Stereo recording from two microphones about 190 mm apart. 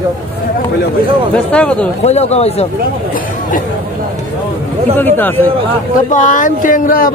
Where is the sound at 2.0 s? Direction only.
35° left (ahead or behind).